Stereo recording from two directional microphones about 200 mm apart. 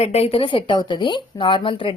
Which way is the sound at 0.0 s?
30° left (ahead or behind).